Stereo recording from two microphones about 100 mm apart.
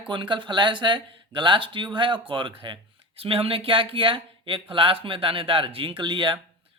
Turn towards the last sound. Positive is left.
turn(degrees=-55)  # may be behind; listen again after turning